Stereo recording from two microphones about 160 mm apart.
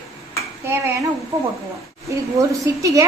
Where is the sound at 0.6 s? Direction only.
20° right (ahead or behind).